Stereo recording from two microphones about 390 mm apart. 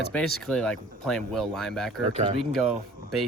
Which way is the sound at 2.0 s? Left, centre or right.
Centre.